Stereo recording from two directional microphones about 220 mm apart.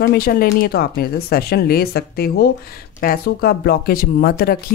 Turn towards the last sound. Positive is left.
turn(degrees=45)  # may be behind; listen again after turning